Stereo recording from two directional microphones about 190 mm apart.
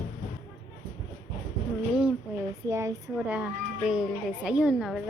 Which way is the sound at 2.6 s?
15° right (ahead or behind).